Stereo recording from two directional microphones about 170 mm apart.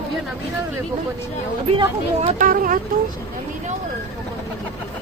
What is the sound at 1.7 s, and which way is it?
Speech, 35° right (ahead or behind).